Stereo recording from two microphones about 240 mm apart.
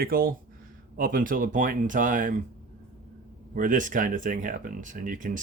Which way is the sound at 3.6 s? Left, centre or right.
Right.